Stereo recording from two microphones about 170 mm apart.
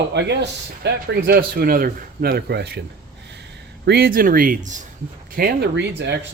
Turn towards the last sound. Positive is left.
turn(degrees=-85)